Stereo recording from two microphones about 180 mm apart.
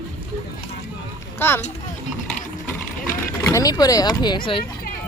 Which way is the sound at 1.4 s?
10° left (ahead or behind).